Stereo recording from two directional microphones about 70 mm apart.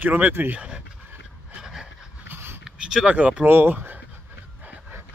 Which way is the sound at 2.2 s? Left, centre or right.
Right.